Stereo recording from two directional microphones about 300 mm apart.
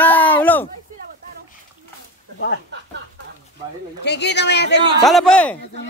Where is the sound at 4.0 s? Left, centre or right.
Left.